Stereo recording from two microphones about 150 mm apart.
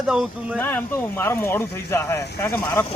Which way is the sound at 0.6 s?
15° left (ahead or behind).